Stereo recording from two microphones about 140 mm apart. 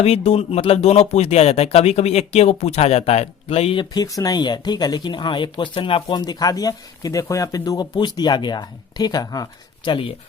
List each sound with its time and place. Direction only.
0.0 s speech: 45° left (ahead or behind)
3.9 s speech: 25° left (ahead or behind)